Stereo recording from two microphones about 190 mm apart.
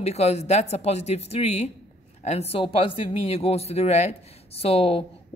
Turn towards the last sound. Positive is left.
turn(degrees=30)  # may be behind; listen again after turning